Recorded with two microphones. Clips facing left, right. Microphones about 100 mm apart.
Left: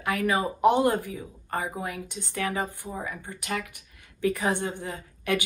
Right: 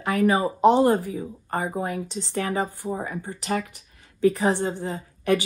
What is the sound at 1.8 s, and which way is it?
Speech, 35° right (ahead or behind).